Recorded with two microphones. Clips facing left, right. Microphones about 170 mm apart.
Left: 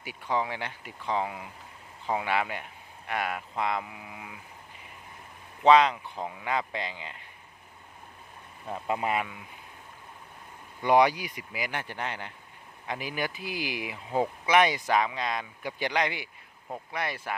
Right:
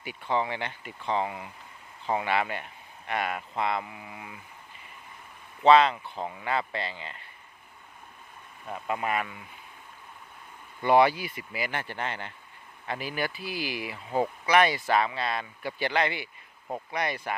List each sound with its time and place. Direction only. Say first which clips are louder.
0.0 s speech: right 1 dB; 10° left (ahead or behind)
5.6 s speech: right 1 dB; 10° left (ahead or behind)
8.6 s speech: left 1 dB; 25° left (ahead or behind)
10.8 s speech: right 1 dB; 15° left (ahead or behind)